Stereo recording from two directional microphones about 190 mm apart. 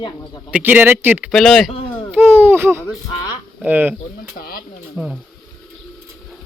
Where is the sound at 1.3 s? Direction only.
Centre (ahead or behind).